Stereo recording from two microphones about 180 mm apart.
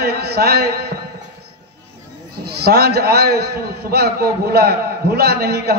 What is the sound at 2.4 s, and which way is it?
A man's voice, 60° right (ahead or behind).